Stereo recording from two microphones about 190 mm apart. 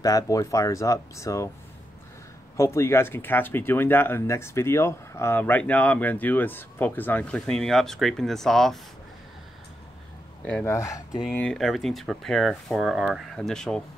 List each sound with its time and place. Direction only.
0.0 s speech: 15° left (ahead or behind)
2.5 s speech: 15° left (ahead or behind)
10.4 s speech: 10° left (ahead or behind)
11.2 s speech: 5° left (ahead or behind)